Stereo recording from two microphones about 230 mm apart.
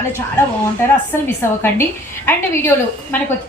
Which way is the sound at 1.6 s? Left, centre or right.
Centre.